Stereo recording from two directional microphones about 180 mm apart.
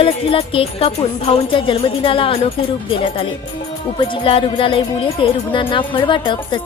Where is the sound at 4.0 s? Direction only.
30° left (ahead or behind).